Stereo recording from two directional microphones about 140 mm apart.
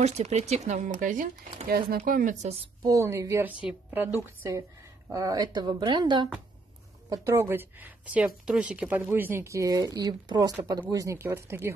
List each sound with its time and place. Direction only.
0.0 s speech: 50° right (ahead or behind); by 2.3 s 90° right
2.8 s speech: 20° right (ahead or behind)
7.1 s speech: 20° right (ahead or behind)